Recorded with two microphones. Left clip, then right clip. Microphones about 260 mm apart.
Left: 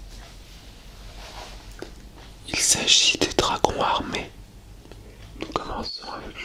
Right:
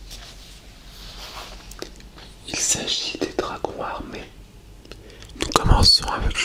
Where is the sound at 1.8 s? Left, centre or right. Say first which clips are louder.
Right 3 dB; centre.